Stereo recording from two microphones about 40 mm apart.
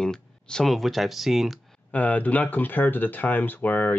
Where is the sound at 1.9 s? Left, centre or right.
Left.